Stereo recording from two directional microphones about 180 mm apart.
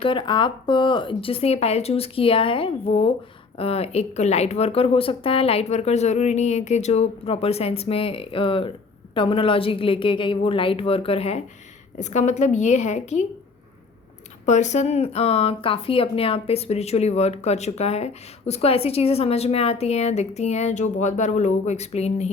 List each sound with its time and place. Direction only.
0.0 s a woman's voice: 30° left (ahead or behind)
14.4 s speech: 40° left (ahead or behind)